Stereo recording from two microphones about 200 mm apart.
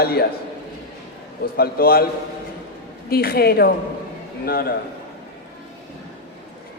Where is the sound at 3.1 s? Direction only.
50° left (ahead or behind).